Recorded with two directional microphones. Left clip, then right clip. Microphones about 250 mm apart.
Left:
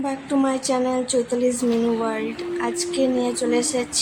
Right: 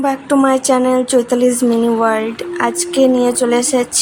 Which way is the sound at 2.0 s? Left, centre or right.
Right.